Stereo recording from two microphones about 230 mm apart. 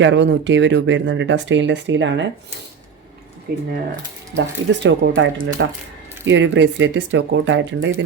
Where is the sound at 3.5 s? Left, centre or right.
Right.